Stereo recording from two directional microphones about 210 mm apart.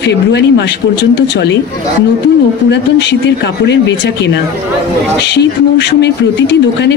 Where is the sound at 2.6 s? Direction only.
55° left (ahead or behind).